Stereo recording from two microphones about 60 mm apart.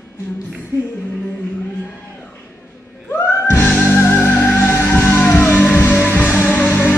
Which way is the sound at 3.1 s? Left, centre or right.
Left.